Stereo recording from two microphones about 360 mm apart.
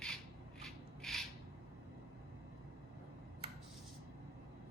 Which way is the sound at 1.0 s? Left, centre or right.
Centre.